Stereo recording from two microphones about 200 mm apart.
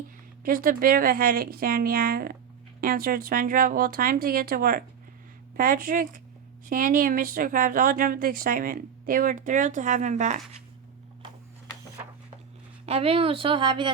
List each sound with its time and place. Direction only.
0.4 s a woman's voice: 45° right (ahead or behind)
12.8 s a woman's voice: 30° right (ahead or behind)